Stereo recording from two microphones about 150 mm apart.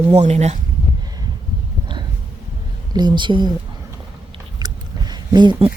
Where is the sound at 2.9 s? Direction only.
30° right (ahead or behind).